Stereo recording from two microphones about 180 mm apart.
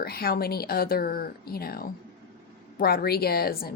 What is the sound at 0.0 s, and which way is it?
Speech, 60° left (ahead or behind).